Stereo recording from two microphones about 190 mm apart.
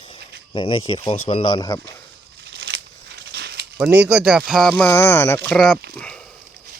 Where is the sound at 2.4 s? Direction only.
60° right (ahead or behind).